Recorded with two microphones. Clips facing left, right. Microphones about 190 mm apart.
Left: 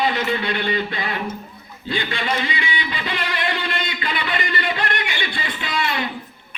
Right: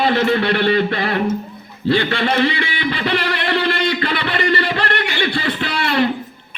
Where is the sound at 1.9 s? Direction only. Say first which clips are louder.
Right 7 dB; 60° right (ahead or behind).